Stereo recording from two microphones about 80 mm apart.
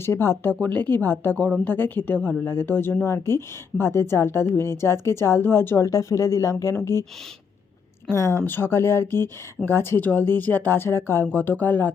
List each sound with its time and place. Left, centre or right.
0.0 s a woman's voice: left
0.6 s a woman's voice: centre
8.1 s a woman's voice: left